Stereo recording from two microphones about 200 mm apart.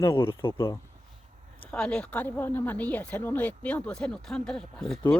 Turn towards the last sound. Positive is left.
turn(degrees=5)  # may be behind; listen again after turning